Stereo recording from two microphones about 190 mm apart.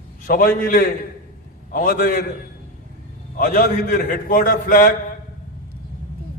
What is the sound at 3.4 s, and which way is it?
A man's voice, 50° left (ahead or behind).